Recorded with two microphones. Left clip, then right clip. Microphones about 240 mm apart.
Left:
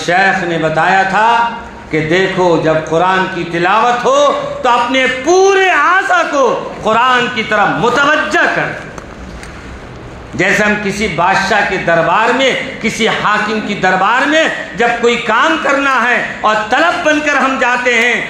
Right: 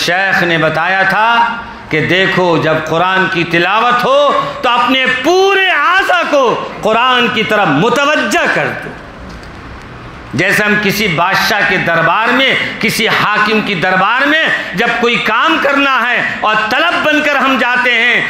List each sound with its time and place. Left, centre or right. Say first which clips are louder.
0.0 s a man's voice: even; right
10.3 s a man's voice: right 1 dB; right